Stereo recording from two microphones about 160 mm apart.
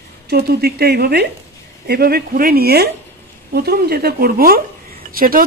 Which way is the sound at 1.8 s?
75° right (ahead or behind).